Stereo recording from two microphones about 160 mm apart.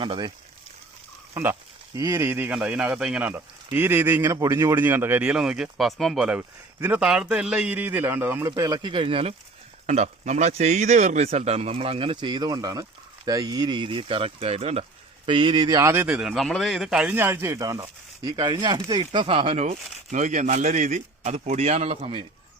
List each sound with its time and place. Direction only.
0.0 s speech: 30° right (ahead or behind)
1.3 s speech: 15° right (ahead or behind); by 9.3 s 35° right (ahead or behind)
9.8 s speech: 45° right (ahead or behind)
15.3 s speech: 30° right (ahead or behind)
16.0 s speech: 5° right (ahead or behind)
17.2 s speech: 15° right (ahead or behind)
17.7 s speech: 30° right (ahead or behind)